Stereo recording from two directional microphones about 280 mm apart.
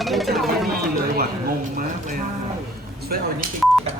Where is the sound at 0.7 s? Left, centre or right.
Right.